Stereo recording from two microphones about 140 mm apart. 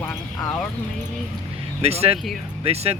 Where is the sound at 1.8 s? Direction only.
45° right (ahead or behind).